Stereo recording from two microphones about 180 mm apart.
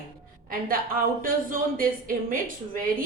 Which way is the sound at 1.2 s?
50° right (ahead or behind).